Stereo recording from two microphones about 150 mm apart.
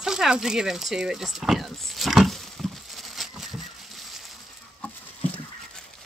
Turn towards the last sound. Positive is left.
turn(degrees=10)  # may be behind; listen again after turning